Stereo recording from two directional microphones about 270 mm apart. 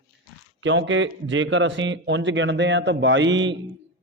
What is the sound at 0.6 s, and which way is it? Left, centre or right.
A man's voice, right.